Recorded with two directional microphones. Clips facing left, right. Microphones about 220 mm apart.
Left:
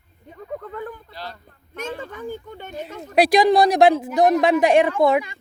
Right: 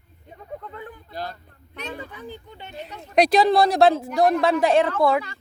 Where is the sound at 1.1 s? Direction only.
50° right (ahead or behind).